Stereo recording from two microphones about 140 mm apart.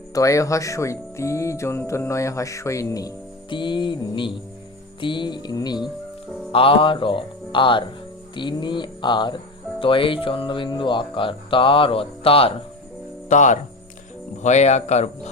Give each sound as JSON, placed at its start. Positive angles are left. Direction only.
{"t": 0.1, "sound": "speech", "side_deg": 20}
{"t": 3.5, "sound": "speech", "side_deg": 35}
{"t": 6.5, "sound": "speech", "side_deg": 40}
{"t": 13.2, "sound": "speech", "side_deg": 60}